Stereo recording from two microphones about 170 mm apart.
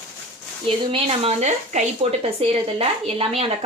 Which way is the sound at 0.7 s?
35° right (ahead or behind).